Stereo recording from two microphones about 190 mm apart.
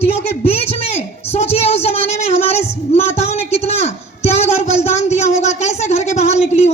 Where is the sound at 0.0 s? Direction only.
30° left (ahead or behind).